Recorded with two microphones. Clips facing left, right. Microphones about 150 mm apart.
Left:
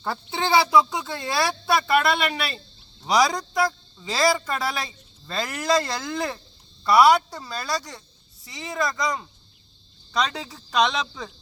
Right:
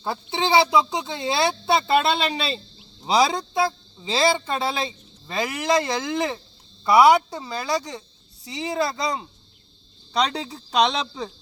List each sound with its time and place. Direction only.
0.0 s speech: 20° right (ahead or behind)
5.2 s speech: 15° right (ahead or behind)
8.5 s speech: 30° right (ahead or behind)